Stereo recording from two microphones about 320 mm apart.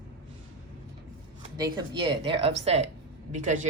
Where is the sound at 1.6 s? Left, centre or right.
Centre.